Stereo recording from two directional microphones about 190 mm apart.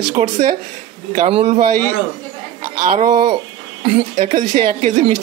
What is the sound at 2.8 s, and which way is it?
Speech, 40° right (ahead or behind).